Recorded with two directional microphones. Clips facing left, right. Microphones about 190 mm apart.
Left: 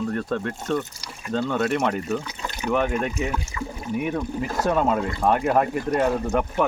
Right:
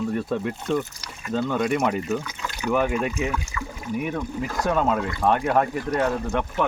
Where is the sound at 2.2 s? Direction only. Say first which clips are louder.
Even; 30° left (ahead or behind).